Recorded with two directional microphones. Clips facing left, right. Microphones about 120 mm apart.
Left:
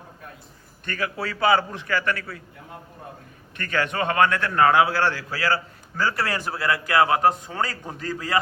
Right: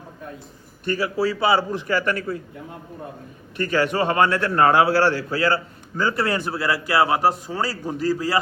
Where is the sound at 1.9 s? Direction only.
15° right (ahead or behind).